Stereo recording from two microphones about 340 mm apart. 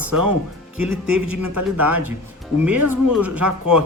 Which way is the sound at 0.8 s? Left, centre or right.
Centre.